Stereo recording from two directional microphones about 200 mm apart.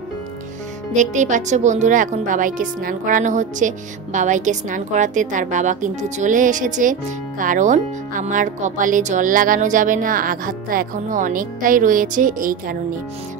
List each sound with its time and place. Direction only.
0.9 s speech: 35° right (ahead or behind)